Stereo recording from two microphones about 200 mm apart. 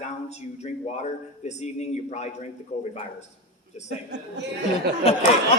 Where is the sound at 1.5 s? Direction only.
35° left (ahead or behind).